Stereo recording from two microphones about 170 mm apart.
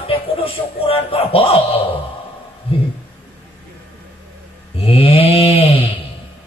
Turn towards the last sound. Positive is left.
turn(degrees=35)  # may be behind; listen again after turning